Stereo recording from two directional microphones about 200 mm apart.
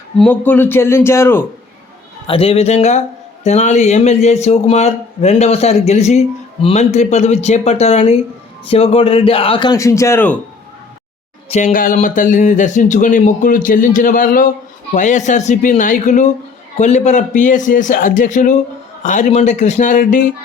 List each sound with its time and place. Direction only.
0.2 s a man's voice: 10° left (ahead or behind)
2.2 s a man's voice: 30° left (ahead or behind); by 10.3 s 10° left (ahead or behind)
11.4 s a man's voice: 35° left (ahead or behind)